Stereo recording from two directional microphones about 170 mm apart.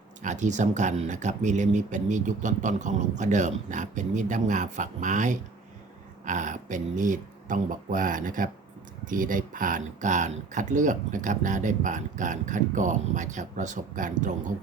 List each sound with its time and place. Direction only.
0.2 s speech: 45° right (ahead or behind)